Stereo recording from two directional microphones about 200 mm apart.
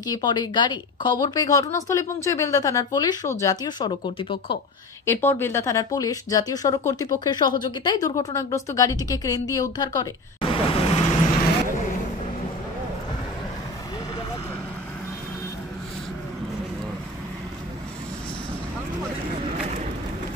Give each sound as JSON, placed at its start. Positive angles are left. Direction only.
{"t": 0.0, "sound": "speech", "side_deg": 20}
{"t": 5.0, "sound": "speech", "side_deg": 10}